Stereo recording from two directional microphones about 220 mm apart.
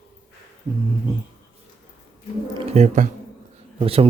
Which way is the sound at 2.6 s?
30° right (ahead or behind).